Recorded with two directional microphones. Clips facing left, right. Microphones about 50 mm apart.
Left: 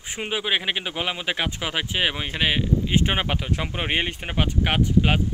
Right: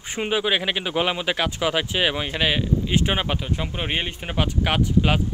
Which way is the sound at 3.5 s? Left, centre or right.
Left.